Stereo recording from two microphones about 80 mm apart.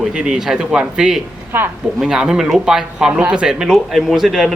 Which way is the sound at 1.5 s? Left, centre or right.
Right.